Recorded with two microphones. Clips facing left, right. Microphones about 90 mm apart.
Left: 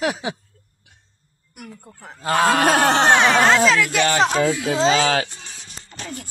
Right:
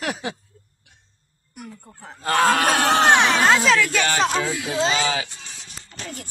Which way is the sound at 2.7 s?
55° left (ahead or behind).